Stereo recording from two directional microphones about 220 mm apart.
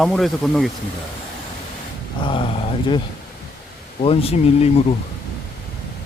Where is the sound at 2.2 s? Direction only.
25° left (ahead or behind).